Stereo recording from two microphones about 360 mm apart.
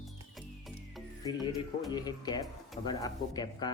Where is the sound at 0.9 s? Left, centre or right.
Centre.